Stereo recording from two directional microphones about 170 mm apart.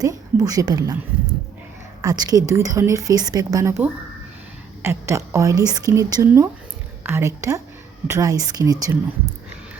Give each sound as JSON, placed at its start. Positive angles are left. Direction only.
{"t": 0.0, "sound": "a woman's voice", "side_deg": -20}
{"t": 2.0, "sound": "a woman's voice", "side_deg": -20}